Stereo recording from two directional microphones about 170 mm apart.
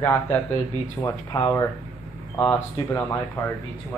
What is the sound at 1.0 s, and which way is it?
Speech, 20° left (ahead or behind).